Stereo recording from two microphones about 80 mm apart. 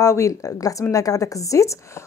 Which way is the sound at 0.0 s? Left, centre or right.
Left.